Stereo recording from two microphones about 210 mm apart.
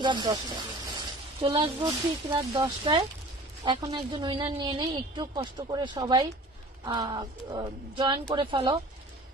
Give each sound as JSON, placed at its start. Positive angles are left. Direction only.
{"t": 0.0, "sound": "a woman's voice", "side_deg": -20}